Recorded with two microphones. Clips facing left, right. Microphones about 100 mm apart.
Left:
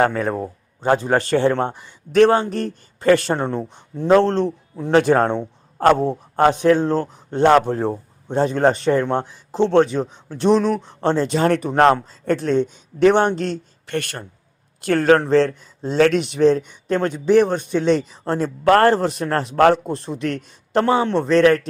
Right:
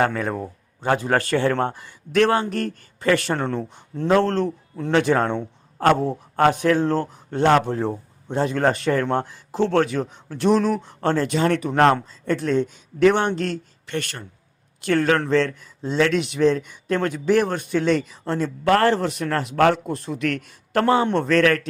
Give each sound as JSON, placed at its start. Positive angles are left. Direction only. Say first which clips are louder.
{"t": 0.0, "sound": "a man's voice", "louder": "left 3 dB", "side_deg": 35}
{"t": 3.5, "sound": "speech", "louder": "left 2 dB", "side_deg": 5}
{"t": 4.1, "sound": "a man's voice", "louder": "left 4 dB", "side_deg": 25}
{"t": 4.9, "sound": "a man's voice", "louder": "left 4 dB", "side_deg": 40}
{"t": 11.3, "sound": "a man's voice", "louder": "left 3 dB", "side_deg": 40}
{"t": 11.7, "sound": "a man's voice", "louder": "left 2 dB", "side_deg": 30}
{"t": 12.2, "sound": "speech", "louder": "left 3 dB", "side_deg": 40}
{"t": 12.5, "sound": "a man's voice", "louder": "left 2 dB", "side_deg": 25}
{"t": 13.8, "sound": "a man's voice", "louder": "left 4 dB", "side_deg": 45}